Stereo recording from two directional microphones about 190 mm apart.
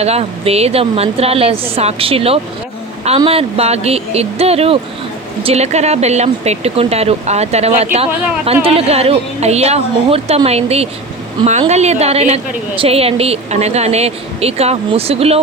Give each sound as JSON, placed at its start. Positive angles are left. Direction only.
{"t": 0.0, "sound": "a woman's voice", "side_deg": -35}